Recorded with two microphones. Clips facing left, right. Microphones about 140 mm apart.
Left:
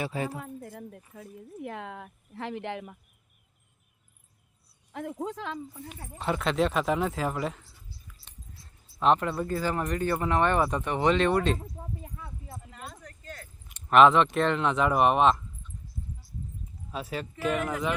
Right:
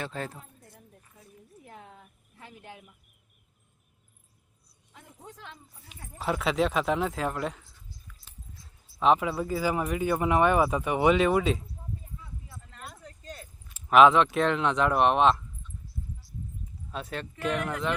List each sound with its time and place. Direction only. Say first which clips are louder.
0.0 s speech: left 4 dB; 10° left (ahead or behind)
0.3 s speech: left 10 dB; 85° left; by 3.0 s 70° left (ahead or behind)
4.9 s speech: left 15 dB; 70° left (ahead or behind); by 5.9 s 90° left
6.1 s speech: even; centre (ahead or behind)
11.5 s a sound: left 2 dB; 90° left
12.7 s a sound: right 1 dB; centre (ahead or behind)
13.0 s a sound: right 1 dB; 15° right (ahead or behind)
13.7 s speech: even; centre (ahead or behind)
16.9 s speech: left 2 dB; 5° left (ahead or behind)